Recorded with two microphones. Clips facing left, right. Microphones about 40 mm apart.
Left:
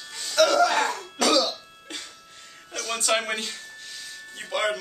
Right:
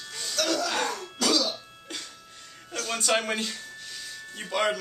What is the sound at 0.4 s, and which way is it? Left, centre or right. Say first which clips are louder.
Music: left 9 dB; left.